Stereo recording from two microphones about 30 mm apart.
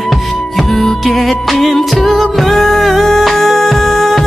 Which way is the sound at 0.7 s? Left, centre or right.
Centre.